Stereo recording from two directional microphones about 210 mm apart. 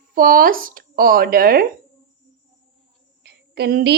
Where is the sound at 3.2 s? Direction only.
50° right (ahead or behind).